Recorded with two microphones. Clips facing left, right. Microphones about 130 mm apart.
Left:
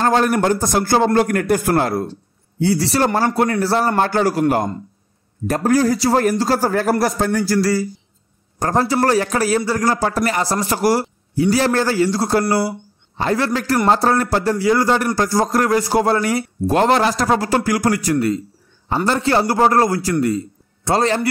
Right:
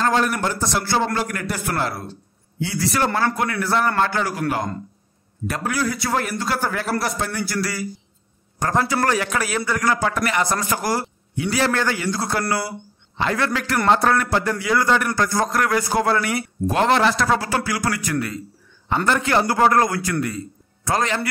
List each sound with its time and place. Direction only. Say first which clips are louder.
0.0 s a man's voice: left 4 dB; 40° left (ahead or behind)
2.6 s a man's voice: left 5 dB; 35° left (ahead or behind)
19.0 s a man's voice: left 3 dB; 30° left (ahead or behind)